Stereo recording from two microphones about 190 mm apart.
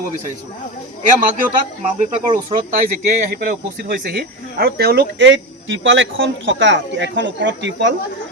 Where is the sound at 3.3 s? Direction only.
50° right (ahead or behind); by 8.0 s 70° right (ahead or behind).